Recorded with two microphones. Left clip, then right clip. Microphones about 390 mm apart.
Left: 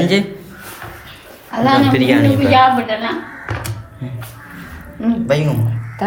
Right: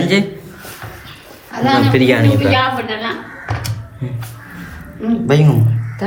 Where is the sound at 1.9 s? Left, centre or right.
Centre.